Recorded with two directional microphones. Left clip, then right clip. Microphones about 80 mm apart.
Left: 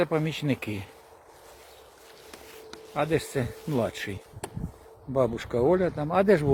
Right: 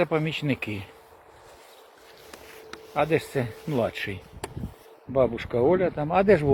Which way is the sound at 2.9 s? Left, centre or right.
Centre.